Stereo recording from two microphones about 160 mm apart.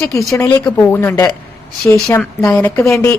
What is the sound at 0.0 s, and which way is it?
A woman's voice, 20° left (ahead or behind).